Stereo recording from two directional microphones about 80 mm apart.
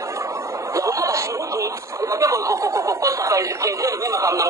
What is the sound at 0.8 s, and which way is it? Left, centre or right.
Speech, right.